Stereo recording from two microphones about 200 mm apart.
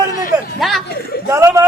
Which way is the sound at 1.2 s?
15° right (ahead or behind).